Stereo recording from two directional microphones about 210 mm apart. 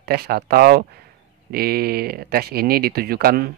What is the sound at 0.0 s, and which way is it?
Speech, 50° right (ahead or behind).